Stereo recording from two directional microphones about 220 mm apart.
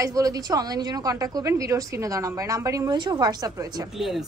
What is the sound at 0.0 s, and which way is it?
A woman's voice, 15° right (ahead or behind).